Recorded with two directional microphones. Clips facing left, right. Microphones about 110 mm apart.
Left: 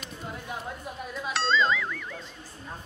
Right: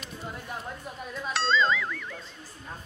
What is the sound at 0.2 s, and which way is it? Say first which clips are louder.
Music: left 1 dB; centre (ahead or behind).